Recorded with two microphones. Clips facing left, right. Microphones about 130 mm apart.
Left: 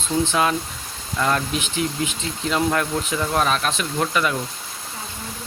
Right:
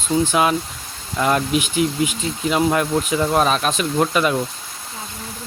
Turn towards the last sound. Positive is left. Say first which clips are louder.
# right 4 dB
turn(degrees=-25)  # may be behind; listen again after turning